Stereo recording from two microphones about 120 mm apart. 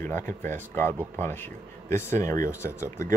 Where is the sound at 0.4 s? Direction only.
15° left (ahead or behind).